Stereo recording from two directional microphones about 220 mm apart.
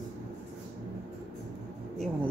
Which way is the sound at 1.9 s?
Centre (ahead or behind).